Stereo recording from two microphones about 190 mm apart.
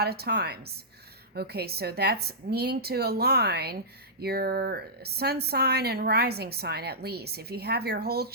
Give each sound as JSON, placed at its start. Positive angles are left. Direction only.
{"t": 0.0, "sound": "speech", "side_deg": -55}